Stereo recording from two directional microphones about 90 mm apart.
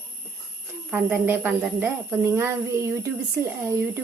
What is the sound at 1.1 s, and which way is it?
A woman's voice, 25° right (ahead or behind).